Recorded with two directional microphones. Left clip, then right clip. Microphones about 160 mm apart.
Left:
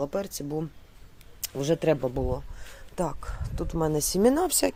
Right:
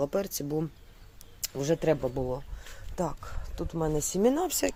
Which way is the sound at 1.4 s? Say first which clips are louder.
Left 2 dB; 15° left (ahead or behind).